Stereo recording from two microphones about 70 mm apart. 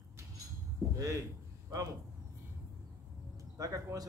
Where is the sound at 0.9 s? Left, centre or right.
Right.